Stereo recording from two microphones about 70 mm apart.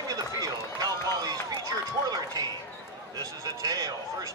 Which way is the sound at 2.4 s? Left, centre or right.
Right.